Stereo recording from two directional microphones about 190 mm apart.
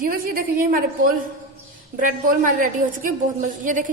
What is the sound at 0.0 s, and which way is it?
Speech, 50° right (ahead or behind).